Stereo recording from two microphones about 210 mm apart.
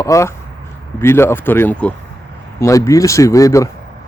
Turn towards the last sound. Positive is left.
turn(degrees=15)  # may be behind; listen again after turning